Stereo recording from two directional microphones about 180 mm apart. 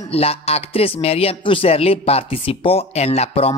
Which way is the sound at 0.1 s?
35° left (ahead or behind).